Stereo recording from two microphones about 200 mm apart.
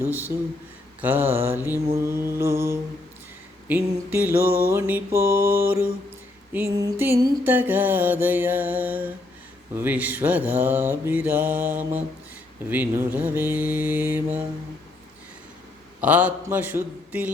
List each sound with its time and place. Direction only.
0.0 s mantra: 10° right (ahead or behind)
7.0 s mantra: 10° right (ahead or behind)
16.0 s mantra: 10° right (ahead or behind)